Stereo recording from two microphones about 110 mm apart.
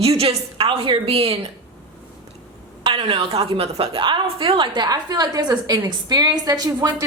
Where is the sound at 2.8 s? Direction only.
55° right (ahead or behind).